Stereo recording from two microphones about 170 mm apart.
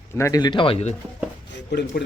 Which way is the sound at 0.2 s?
20° left (ahead or behind).